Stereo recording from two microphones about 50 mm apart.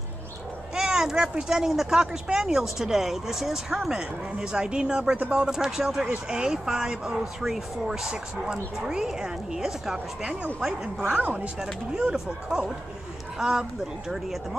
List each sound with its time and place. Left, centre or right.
0.7 s speech: centre
11.1 s speech: right; by 14.6 s centre